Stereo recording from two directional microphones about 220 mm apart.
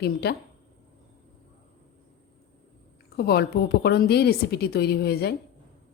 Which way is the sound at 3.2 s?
45° left (ahead or behind).